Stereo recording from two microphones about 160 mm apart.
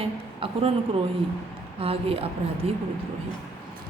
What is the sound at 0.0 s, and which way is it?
Speech, 35° right (ahead or behind).